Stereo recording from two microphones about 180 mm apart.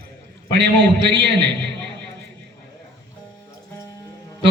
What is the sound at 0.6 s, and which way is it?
A man's voice, 75° right (ahead or behind).